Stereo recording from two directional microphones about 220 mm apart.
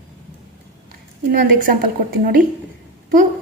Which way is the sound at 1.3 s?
40° right (ahead or behind).